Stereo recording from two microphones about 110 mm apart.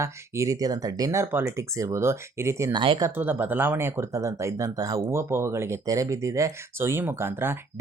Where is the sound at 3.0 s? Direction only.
25° right (ahead or behind).